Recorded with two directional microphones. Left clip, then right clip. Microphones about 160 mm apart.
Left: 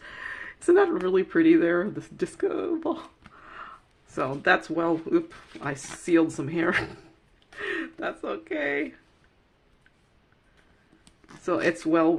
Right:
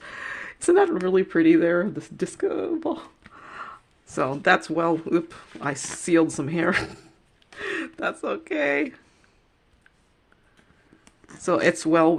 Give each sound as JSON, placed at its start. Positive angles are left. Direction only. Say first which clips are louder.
{"t": 0.0, "sound": "a sound", "louder": "right 3 dB", "side_deg": -40}
{"t": 1.0, "sound": "speech", "louder": "right 2 dB", "side_deg": -25}
{"t": 3.3, "sound": "a sound", "louder": "right 5 dB", "side_deg": -40}
{"t": 5.5, "sound": "speech", "louder": "right 4 dB", "side_deg": -20}
{"t": 6.1, "sound": "speech", "louder": "right 2 dB", "side_deg": -35}
{"t": 7.5, "sound": "speech", "louder": "right 1 dB", "side_deg": -30}
{"t": 11.4, "sound": "speech", "louder": "right 4 dB", "side_deg": -40}